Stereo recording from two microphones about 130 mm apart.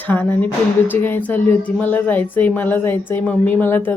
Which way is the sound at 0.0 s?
15° left (ahead or behind).